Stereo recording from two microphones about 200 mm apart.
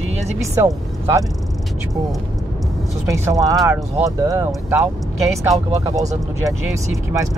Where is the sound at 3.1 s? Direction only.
15° right (ahead or behind).